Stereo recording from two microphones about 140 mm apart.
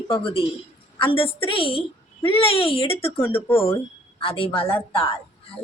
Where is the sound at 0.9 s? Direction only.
40° left (ahead or behind).